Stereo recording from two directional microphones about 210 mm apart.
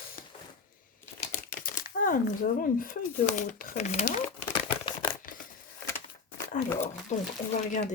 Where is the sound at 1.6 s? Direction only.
40° left (ahead or behind).